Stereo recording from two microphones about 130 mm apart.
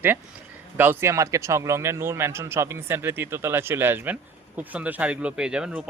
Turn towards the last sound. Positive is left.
turn(degrees=-10)  # may be behind; listen again after turning